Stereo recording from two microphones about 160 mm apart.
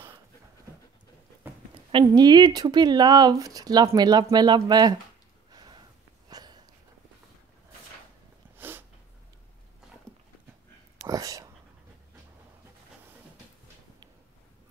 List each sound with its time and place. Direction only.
1.9 s speech: 30° right (ahead or behind)
5.5 s snort: 25° right (ahead or behind)
8.5 s snort: 15° right (ahead or behind)
11.1 s whispering: 20° right (ahead or behind)